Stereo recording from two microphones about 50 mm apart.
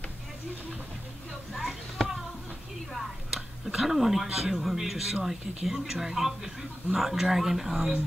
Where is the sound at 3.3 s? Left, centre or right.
Centre.